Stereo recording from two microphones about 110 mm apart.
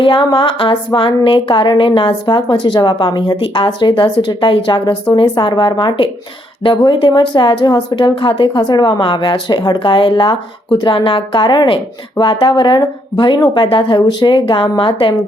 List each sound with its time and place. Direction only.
0.0 s a woman's voice: 50° left (ahead or behind)